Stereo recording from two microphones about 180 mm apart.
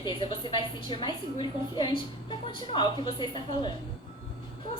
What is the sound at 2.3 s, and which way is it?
A woman's voice, 25° left (ahead or behind).